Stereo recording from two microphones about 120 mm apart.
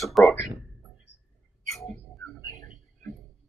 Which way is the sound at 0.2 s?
Centre (ahead or behind).